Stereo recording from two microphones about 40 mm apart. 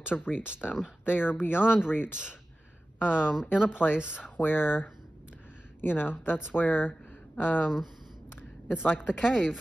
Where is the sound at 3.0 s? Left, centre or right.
Centre.